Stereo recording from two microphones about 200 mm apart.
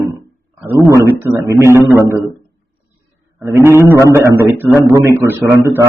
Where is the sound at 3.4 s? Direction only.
15° right (ahead or behind).